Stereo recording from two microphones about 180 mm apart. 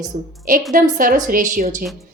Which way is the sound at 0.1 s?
45° right (ahead or behind).